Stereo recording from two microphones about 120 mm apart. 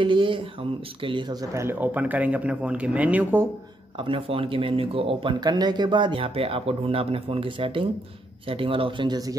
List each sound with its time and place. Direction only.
0.0 s a sound: 45° right (ahead or behind)
1.0 s speech: 40° right (ahead or behind)
1.5 s speech: 20° right (ahead or behind)
4.0 s speech: 45° right (ahead or behind)
5.4 s speech: 35° right (ahead or behind)